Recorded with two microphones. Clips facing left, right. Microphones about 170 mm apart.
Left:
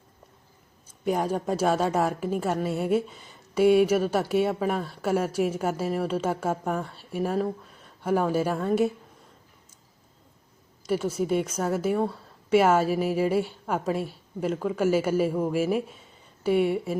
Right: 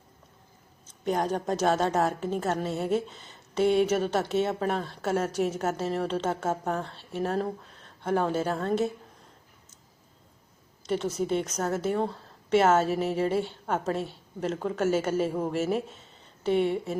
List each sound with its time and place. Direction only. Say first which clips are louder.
0.9 s a woman's voice: left 1 dB; 10° left (ahead or behind)
10.8 s a woman's voice: left 2 dB; 10° left (ahead or behind)